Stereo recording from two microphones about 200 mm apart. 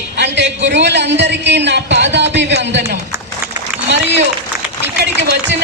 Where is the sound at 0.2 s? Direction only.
60° right (ahead or behind).